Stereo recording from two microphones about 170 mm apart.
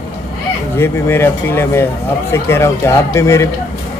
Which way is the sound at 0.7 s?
15° left (ahead or behind).